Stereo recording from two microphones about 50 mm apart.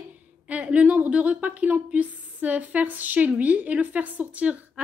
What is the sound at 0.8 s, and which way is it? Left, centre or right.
A woman's voice, right.